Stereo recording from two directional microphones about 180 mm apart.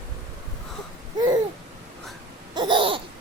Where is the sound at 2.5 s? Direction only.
25° right (ahead or behind).